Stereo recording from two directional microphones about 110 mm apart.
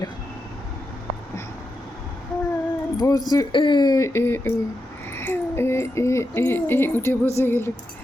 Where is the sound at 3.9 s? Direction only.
25° left (ahead or behind).